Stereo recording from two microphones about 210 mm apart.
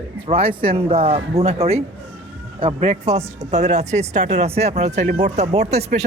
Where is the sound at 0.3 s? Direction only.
25° right (ahead or behind).